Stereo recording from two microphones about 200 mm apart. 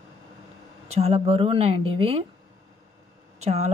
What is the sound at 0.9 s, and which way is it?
A woman's voice, 30° right (ahead or behind).